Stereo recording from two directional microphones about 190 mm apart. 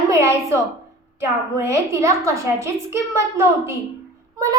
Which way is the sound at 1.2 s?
15° right (ahead or behind).